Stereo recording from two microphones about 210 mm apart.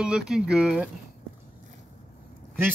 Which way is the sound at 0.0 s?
5° right (ahead or behind).